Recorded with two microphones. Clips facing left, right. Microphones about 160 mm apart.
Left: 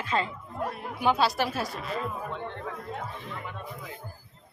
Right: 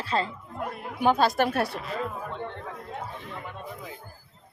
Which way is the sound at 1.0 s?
45° right (ahead or behind).